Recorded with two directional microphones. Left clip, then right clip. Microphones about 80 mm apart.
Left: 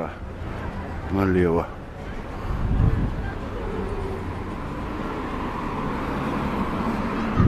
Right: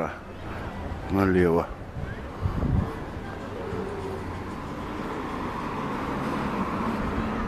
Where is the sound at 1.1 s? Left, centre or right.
Centre.